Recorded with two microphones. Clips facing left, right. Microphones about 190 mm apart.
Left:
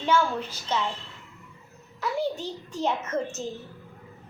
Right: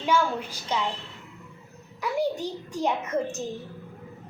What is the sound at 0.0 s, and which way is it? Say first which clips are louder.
Speech: even; 10° right (ahead or behind).